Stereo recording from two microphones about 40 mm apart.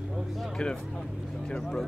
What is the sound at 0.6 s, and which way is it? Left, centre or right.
Speech, centre.